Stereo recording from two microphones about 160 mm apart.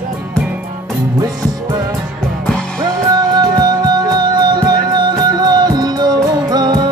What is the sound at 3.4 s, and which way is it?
Music, 25° right (ahead or behind).